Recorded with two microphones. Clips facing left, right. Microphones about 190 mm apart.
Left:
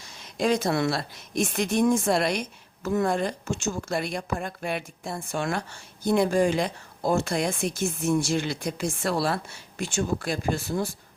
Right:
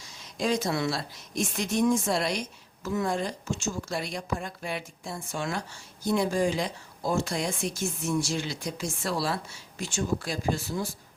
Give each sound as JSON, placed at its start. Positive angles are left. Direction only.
{"t": 0.0, "sound": "speech", "side_deg": 60}